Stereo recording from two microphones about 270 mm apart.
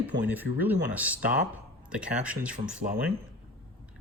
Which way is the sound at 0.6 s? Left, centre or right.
Centre.